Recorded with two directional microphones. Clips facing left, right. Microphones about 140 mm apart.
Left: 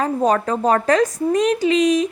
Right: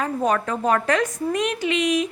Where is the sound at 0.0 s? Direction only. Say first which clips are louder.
Left 4 dB; 35° left (ahead or behind).